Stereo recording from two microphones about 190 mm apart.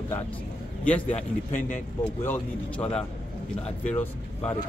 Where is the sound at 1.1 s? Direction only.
45° left (ahead or behind).